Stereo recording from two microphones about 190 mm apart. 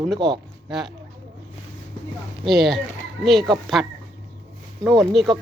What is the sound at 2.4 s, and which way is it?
Speech, centre (ahead or behind).